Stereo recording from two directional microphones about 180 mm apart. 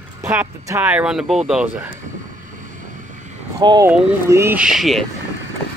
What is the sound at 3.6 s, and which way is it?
Speech, 20° right (ahead or behind).